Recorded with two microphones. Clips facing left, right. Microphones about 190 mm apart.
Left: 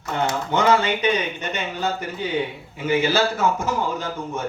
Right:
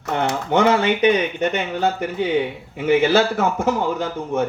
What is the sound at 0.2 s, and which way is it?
A man's voice, 60° right (ahead or behind).